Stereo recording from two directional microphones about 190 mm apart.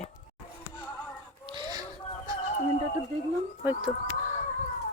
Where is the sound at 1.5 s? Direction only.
20° right (ahead or behind).